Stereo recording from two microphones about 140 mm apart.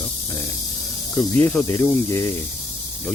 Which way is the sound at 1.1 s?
10° left (ahead or behind).